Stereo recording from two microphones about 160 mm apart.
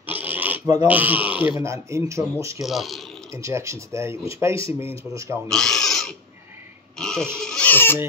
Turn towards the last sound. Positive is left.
turn(degrees=15)  # may be behind; listen again after turning